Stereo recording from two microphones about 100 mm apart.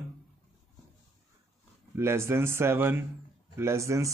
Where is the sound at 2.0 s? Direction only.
25° right (ahead or behind).